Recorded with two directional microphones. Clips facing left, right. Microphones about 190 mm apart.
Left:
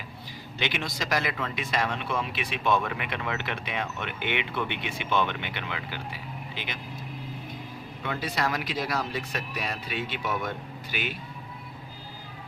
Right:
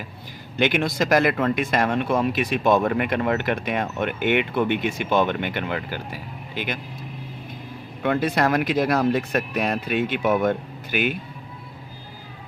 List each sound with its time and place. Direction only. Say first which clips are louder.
0.5 s speech: right 10 dB; 50° right (ahead or behind)
8.0 s speech: right 9 dB; 55° right (ahead or behind)